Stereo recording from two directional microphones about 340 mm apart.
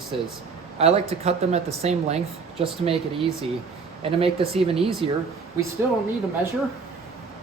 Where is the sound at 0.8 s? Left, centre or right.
Centre.